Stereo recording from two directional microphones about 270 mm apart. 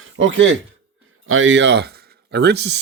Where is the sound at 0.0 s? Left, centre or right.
Right.